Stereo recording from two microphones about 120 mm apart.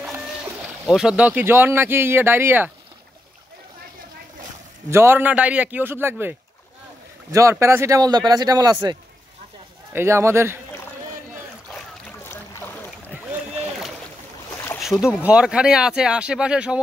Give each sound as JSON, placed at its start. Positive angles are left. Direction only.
{"t": 0.8, "sound": "speech", "side_deg": -5}
{"t": 4.9, "sound": "speech", "side_deg": -20}
{"t": 9.9, "sound": "speech", "side_deg": -20}
{"t": 14.8, "sound": "speech", "side_deg": -5}